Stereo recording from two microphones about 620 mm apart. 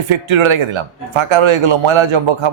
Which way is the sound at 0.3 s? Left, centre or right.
Right.